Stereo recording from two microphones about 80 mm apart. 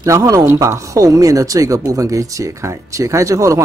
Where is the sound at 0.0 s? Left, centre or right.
Right.